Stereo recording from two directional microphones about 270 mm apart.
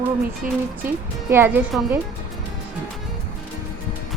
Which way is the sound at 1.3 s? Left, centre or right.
Centre.